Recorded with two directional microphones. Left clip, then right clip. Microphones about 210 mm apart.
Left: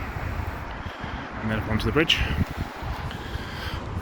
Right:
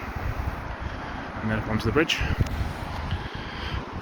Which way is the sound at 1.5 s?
5° left (ahead or behind).